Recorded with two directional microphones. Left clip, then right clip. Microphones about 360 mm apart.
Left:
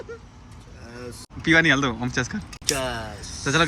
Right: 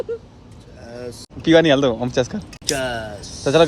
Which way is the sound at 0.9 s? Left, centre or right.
Centre.